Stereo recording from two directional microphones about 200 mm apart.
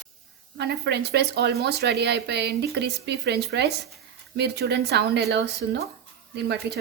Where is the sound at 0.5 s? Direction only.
55° right (ahead or behind).